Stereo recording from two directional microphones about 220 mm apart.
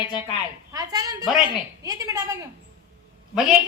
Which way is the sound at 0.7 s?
15° right (ahead or behind).